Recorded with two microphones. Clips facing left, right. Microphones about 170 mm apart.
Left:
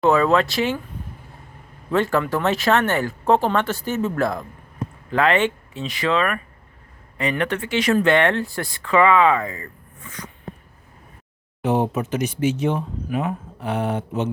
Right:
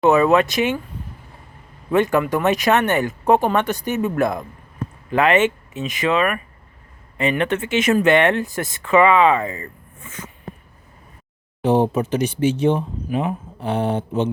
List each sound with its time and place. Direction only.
0.0 s speech: 20° right (ahead or behind)
1.9 s speech: 15° right (ahead or behind)
11.6 s speech: 30° right (ahead or behind)